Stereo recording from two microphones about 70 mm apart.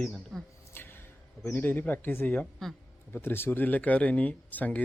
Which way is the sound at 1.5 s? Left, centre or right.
Left.